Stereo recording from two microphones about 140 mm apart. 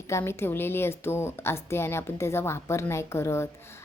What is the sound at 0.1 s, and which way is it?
A woman's voice, 15° left (ahead or behind).